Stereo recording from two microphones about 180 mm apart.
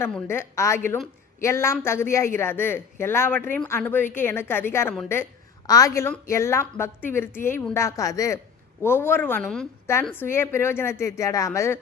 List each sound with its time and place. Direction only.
0.0 s a woman's voice: 15° left (ahead or behind)
9.8 s a woman's voice: 15° left (ahead or behind)